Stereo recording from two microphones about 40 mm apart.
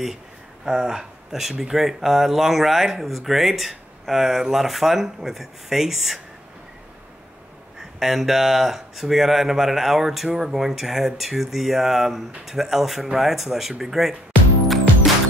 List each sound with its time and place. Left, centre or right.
0.7 s speech: centre
8.0 s speech: centre